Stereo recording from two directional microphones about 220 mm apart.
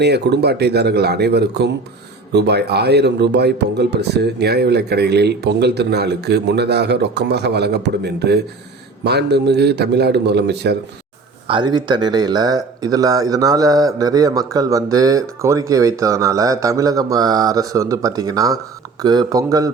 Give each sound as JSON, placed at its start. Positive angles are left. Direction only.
{"t": 0.0, "sound": "speech", "side_deg": -50}
{"t": 11.4, "sound": "a man's voice", "side_deg": -20}